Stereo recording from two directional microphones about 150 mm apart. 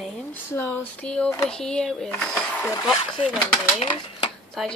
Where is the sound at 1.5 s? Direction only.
5° left (ahead or behind).